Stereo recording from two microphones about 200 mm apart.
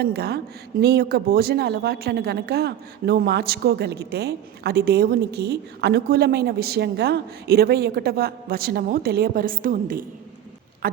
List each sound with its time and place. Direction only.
0.0 s a woman's voice: 50° right (ahead or behind)